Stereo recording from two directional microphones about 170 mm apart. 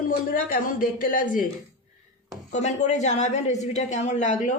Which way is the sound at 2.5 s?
45° left (ahead or behind).